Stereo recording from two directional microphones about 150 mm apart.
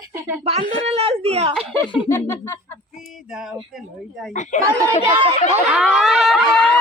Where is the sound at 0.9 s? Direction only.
40° right (ahead or behind).